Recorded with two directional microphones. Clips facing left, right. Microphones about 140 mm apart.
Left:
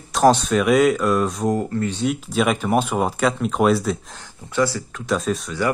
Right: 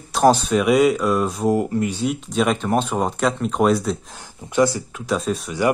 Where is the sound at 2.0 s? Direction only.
5° left (ahead or behind).